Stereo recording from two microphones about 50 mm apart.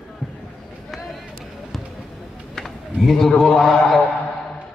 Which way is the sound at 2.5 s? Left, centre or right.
Centre.